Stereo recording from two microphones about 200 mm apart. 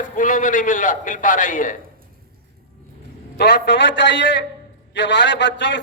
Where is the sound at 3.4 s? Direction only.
55° left (ahead or behind).